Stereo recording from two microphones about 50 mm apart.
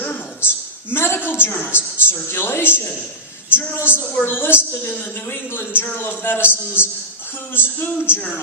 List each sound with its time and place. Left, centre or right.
0.9 s a sound: left
2.0 s a man's voice: left
4.0 s a woman's voice: left
4.3 s a man's voice: left